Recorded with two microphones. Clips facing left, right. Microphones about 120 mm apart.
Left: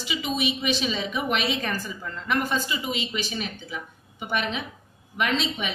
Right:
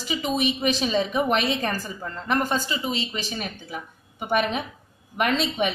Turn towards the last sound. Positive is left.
turn(degrees=-50)  # may be behind; listen again after turning